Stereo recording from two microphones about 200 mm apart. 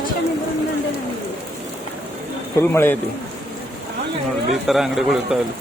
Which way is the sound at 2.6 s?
10° left (ahead or behind).